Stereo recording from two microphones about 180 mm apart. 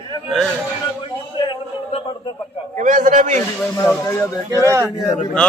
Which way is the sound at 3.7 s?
15° left (ahead or behind).